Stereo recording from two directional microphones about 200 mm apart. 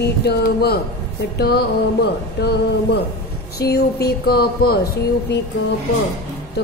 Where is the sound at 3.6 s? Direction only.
55° left (ahead or behind).